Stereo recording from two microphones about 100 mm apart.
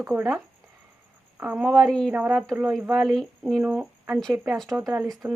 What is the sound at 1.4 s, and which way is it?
Speech, 15° right (ahead or behind).